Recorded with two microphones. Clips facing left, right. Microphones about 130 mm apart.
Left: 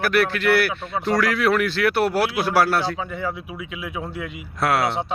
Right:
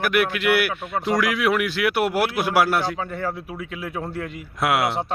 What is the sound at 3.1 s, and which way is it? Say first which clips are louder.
Speech: even; 40° right (ahead or behind).